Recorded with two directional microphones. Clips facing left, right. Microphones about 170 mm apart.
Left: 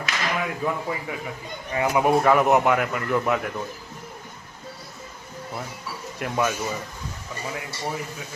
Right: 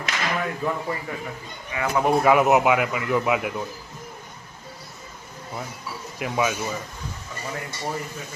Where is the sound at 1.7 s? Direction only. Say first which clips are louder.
Left 4 dB; 45° left (ahead or behind).